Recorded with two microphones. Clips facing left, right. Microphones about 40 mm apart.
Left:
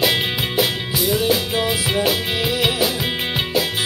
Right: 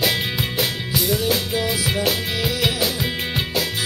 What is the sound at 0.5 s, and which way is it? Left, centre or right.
Music, centre.